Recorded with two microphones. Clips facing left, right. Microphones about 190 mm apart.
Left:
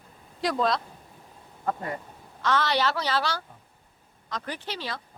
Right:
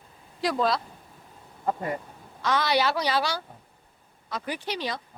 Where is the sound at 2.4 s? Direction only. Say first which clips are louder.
Right 1 dB; 10° right (ahead or behind).